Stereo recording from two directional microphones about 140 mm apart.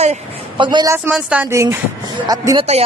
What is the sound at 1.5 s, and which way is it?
Speech, 20° right (ahead or behind).